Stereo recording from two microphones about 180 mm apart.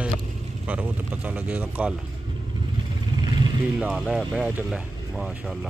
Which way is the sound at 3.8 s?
5° right (ahead or behind).